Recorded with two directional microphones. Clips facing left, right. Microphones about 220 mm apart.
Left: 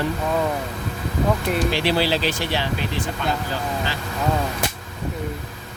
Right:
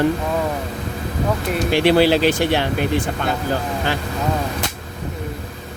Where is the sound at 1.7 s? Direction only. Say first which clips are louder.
Right 7 dB; 55° right (ahead or behind).